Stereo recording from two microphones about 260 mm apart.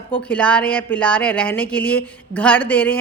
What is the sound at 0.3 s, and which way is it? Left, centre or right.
A woman's voice, centre.